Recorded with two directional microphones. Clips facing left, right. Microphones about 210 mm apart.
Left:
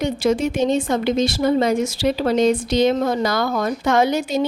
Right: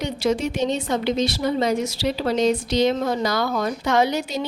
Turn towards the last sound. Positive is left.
turn(degrees=50)  # may be behind; listen again after turning